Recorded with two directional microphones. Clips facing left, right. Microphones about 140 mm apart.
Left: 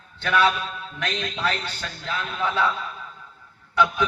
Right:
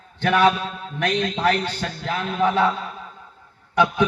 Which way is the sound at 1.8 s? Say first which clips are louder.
Right 5 dB; 55° right (ahead or behind).